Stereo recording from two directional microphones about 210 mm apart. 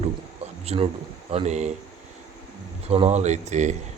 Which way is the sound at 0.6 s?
30° right (ahead or behind).